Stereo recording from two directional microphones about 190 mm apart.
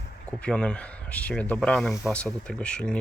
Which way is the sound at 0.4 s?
5° left (ahead or behind).